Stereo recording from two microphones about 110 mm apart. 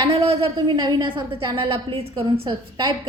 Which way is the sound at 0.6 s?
45° right (ahead or behind).